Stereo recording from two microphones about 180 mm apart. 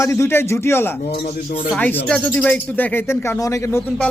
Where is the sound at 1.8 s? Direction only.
10° left (ahead or behind).